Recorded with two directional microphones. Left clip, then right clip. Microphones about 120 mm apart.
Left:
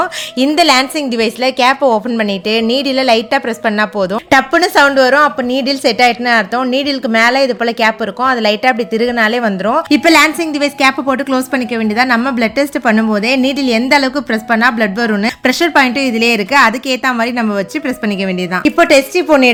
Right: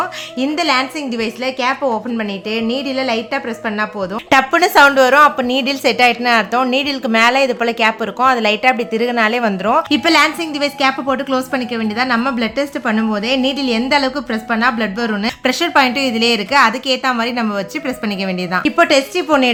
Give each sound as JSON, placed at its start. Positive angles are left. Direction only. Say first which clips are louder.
{"t": 0.0, "sound": "a woman's voice", "louder": "left 5 dB", "side_deg": 85}
{"t": 4.3, "sound": "speech", "louder": "left 1 dB", "side_deg": 25}
{"t": 9.9, "sound": "a woman's voice", "louder": "left 8 dB", "side_deg": 40}